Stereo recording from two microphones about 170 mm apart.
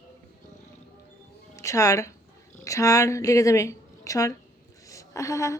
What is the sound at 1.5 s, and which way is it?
A woman's voice, 20° left (ahead or behind).